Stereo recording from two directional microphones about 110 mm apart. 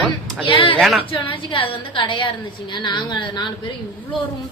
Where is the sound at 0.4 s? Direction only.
50° left (ahead or behind).